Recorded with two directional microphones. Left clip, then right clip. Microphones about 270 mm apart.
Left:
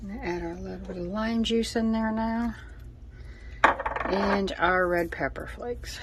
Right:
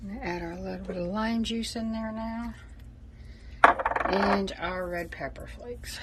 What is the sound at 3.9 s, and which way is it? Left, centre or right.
Coin, right.